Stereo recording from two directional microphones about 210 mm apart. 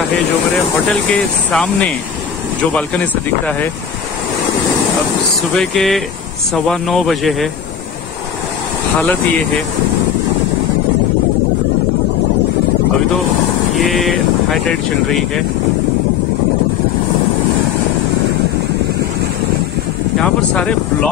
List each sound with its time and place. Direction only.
1.1 s speech: 5° left (ahead or behind)
5.6 s speech: centre (ahead or behind)
13.7 s speech: centre (ahead or behind)
20.2 s speech: 5° left (ahead or behind)